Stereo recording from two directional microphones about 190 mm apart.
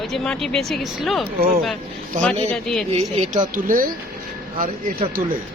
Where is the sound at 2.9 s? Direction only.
35° right (ahead or behind).